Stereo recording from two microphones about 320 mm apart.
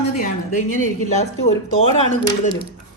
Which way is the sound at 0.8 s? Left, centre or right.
Left.